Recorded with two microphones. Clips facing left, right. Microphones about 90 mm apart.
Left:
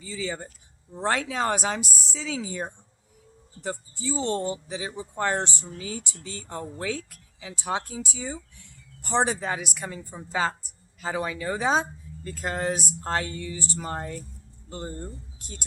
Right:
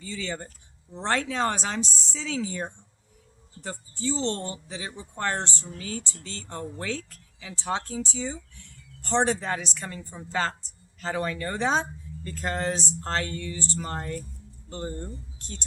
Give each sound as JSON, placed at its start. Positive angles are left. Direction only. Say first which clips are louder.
{"t": 0.0, "sound": "speech", "louder": "left 1 dB", "side_deg": 10}